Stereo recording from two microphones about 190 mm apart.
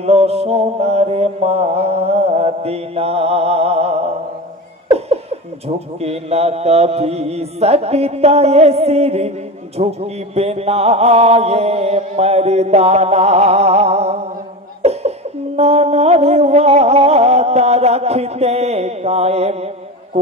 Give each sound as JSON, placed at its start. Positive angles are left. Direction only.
{"t": 0.0, "sound": "mantra", "side_deg": -35}
{"t": 14.8, "sound": "cough", "side_deg": -35}